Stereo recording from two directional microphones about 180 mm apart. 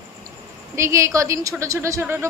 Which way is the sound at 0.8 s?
15° right (ahead or behind).